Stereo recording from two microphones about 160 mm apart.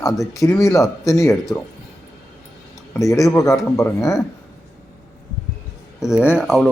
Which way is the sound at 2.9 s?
20° left (ahead or behind).